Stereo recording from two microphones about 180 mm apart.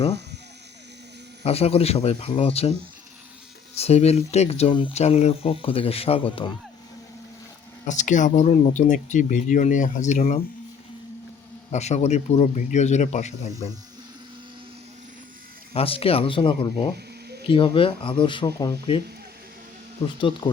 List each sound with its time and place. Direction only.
1.5 s speech: 35° left (ahead or behind)
3.8 s speech: 35° left (ahead or behind)
7.9 s speech: 45° left (ahead or behind)
11.7 s speech: 40° left (ahead or behind)
15.7 s speech: 30° left (ahead or behind)
18.4 s speech: 15° left (ahead or behind)